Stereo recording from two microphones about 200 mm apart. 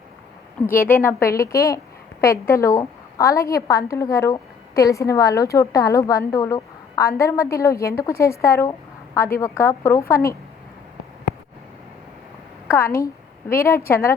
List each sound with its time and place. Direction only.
0.9 s a woman's voice: 10° left (ahead or behind)
12.6 s a woman's voice: 10° left (ahead or behind)